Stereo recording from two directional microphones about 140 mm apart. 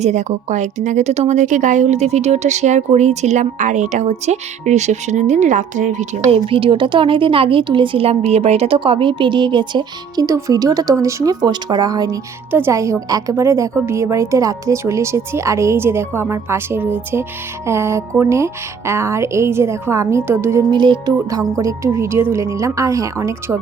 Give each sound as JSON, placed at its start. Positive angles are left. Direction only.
{"t": 0.0, "sound": "speech", "side_deg": -55}
{"t": 6.3, "sound": "speech", "side_deg": -40}
{"t": 10.2, "sound": "a woman's voice", "side_deg": -20}
{"t": 20.7, "sound": "a woman's voice", "side_deg": -35}